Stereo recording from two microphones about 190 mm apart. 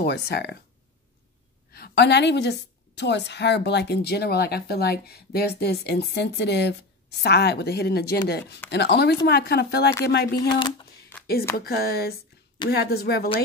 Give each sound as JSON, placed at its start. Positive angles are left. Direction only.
{"t": 0.0, "sound": "a woman's voice", "side_deg": 55}
{"t": 1.7, "sound": "a woman's voice", "side_deg": 55}
{"t": 10.5, "sound": "speech", "side_deg": 25}
{"t": 11.5, "sound": "a woman's voice", "side_deg": 55}